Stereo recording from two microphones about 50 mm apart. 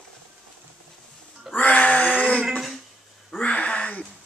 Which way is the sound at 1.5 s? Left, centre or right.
Left.